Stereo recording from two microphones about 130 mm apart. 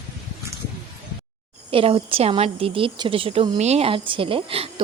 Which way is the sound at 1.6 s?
45° right (ahead or behind).